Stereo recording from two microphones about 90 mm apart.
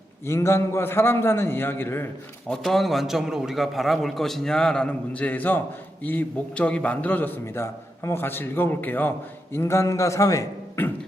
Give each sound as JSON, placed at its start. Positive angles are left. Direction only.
{"t": 0.3, "sound": "a man's voice", "side_deg": 30}
{"t": 2.5, "sound": "a man's voice", "side_deg": 0}